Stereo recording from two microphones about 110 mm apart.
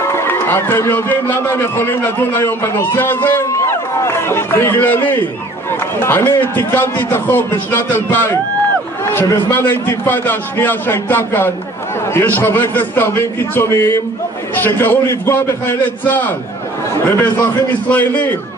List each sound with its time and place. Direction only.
0.0 s a man's voice: 25° left (ahead or behind)